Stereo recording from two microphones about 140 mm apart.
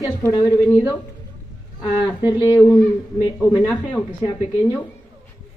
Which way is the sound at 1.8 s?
30° left (ahead or behind).